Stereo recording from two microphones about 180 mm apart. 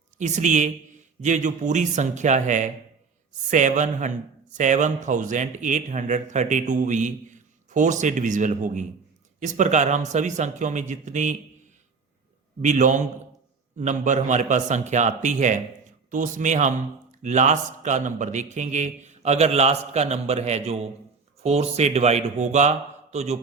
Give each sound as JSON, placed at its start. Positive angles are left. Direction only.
{"t": 0.2, "sound": "a man's voice", "side_deg": -40}
{"t": 12.6, "sound": "a man's voice", "side_deg": -45}